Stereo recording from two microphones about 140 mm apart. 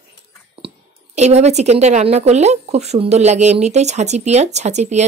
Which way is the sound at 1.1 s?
50° right (ahead or behind).